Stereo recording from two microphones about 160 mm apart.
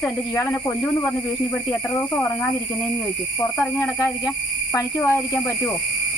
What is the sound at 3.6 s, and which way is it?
Speech, 15° left (ahead or behind).